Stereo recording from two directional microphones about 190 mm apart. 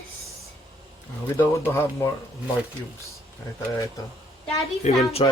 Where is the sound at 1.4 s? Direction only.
10° left (ahead or behind).